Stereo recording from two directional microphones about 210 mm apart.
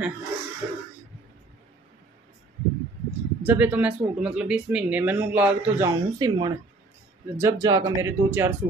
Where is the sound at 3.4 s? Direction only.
10° right (ahead or behind).